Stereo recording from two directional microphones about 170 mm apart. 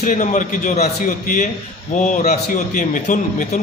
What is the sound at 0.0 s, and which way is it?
Speech, 45° left (ahead or behind).